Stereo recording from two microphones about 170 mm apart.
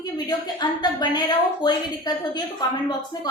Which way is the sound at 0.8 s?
25° left (ahead or behind).